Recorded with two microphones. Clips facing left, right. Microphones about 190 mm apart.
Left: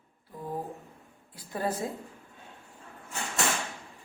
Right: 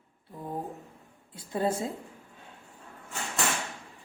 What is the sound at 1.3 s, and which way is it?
Speech, 25° right (ahead or behind).